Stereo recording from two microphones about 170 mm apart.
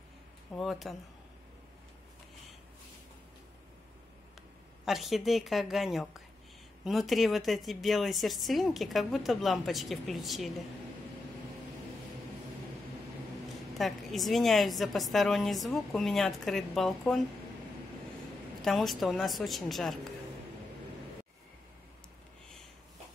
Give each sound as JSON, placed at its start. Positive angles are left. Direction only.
{"t": 0.6, "sound": "a woman's voice", "side_deg": 0}
{"t": 4.8, "sound": "a woman's voice", "side_deg": 0}
{"t": 13.7, "sound": "a woman's voice", "side_deg": 0}
{"t": 18.6, "sound": "a woman's voice", "side_deg": 0}